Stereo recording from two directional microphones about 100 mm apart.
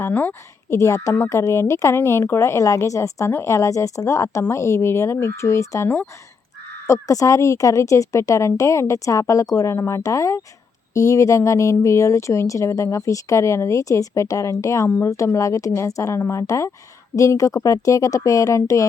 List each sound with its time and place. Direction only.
0.0 s a woman's voice: 20° left (ahead or behind)
0.8 s a woman's voice: 30° left (ahead or behind)